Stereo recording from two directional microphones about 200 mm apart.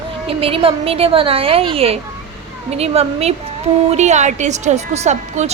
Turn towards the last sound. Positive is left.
turn(degrees=-35)  # may be behind; listen again after turning